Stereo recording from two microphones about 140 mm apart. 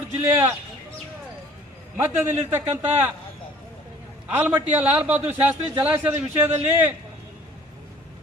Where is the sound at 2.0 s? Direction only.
15° right (ahead or behind).